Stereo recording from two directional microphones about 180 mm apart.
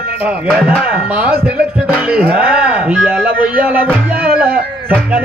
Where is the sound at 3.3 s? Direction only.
50° right (ahead or behind).